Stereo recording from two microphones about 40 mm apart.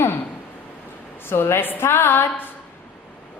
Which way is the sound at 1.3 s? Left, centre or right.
Left.